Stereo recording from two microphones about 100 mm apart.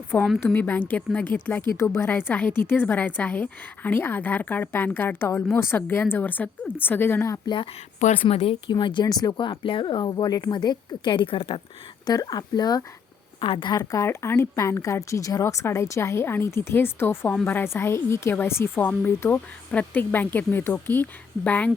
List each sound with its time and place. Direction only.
0.3 s a woman's voice: 20° left (ahead or behind)
7.4 s speech: 55° left (ahead or behind)
8.1 s speech: 75° left (ahead or behind)
8.7 s speech: 55° left (ahead or behind)
9.5 s speech: 60° left (ahead or behind)
12.0 s speech: 40° left (ahead or behind)
13.4 s a woman's voice: 55° left (ahead or behind)
13.7 s a woman's voice: 30° left (ahead or behind); by 21.7 s 15° left (ahead or behind)